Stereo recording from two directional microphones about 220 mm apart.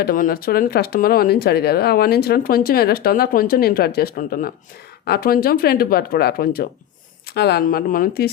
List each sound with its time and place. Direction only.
0.0 s speech: 40° left (ahead or behind)